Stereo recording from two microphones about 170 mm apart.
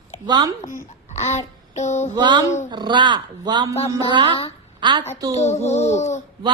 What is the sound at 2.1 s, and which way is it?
A woman's voice, 25° right (ahead or behind).